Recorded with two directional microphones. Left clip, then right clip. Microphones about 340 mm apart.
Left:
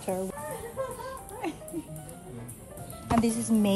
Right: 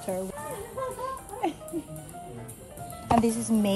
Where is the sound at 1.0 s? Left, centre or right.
Centre.